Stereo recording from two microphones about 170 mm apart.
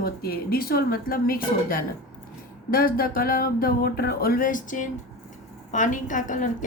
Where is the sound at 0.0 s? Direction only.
65° left (ahead or behind).